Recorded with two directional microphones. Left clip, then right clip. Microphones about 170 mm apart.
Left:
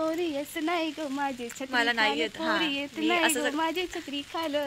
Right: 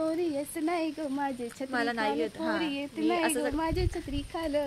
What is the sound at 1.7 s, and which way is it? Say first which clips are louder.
Speech: left 5 dB; 15° right (ahead or behind).